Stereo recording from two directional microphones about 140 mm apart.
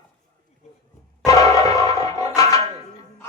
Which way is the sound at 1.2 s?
25° left (ahead or behind).